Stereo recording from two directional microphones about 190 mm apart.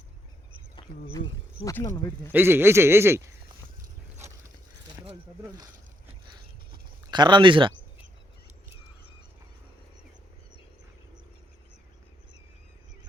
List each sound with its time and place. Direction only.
1.6 s speech: 15° left (ahead or behind)
2.3 s a man's voice: 10° right (ahead or behind)
4.9 s a sound: 20° right (ahead or behind)
7.1 s speech: 25° right (ahead or behind)